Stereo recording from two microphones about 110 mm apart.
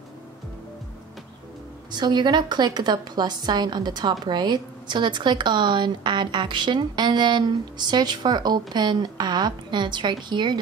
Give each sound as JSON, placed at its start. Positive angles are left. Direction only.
{"t": 1.9, "sound": "a woman's voice", "side_deg": -40}